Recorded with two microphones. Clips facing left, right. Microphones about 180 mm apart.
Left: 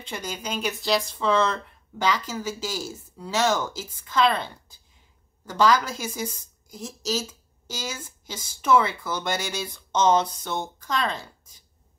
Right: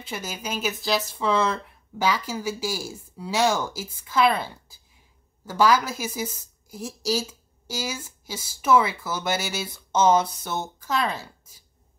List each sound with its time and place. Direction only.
0.0 s a woman's voice: 5° right (ahead or behind)